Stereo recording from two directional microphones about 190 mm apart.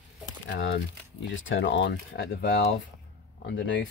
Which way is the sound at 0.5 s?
65° left (ahead or behind).